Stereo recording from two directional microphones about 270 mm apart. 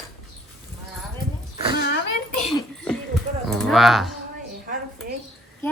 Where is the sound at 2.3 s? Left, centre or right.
Centre.